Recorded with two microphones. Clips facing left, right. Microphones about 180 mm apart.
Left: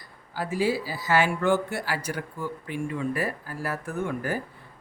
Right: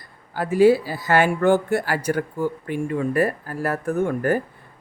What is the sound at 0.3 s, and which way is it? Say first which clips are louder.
Speech: right 10 dB; 55° right (ahead or behind).